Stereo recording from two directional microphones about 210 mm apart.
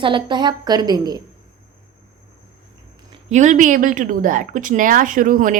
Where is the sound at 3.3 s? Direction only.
35° right (ahead or behind).